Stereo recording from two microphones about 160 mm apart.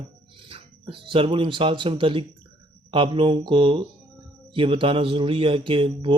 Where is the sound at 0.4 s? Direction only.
35° right (ahead or behind).